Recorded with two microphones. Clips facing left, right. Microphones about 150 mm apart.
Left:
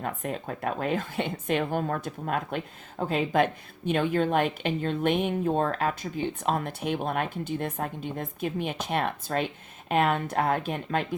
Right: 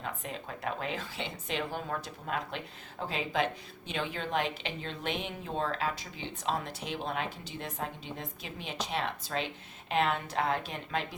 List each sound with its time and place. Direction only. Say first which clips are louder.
0.0 s a woman's voice: left 7 dB; 50° left (ahead or behind)